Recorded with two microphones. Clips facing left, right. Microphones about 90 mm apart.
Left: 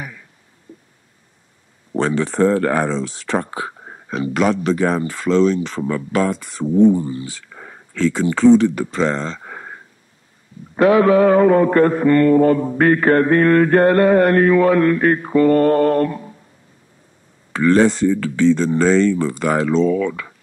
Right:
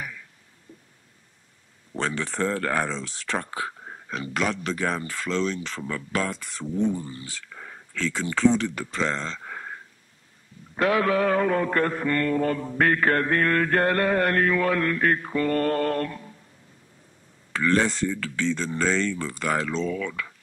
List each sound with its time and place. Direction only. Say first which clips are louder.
0.0 s a sound: left 4 dB; 20° left (ahead or behind)
2.0 s speech: left 10 dB; 15° left (ahead or behind)
4.1 s speech: left 9 dB; 15° left (ahead or behind)
7.5 s a sound: left 3 dB; 25° left (ahead or behind)
7.9 s speech: left 9 dB; 10° left (ahead or behind)
10.8 s mantra: left 10 dB; 15° left (ahead or behind)
17.5 s speech: left 9 dB; 10° left (ahead or behind)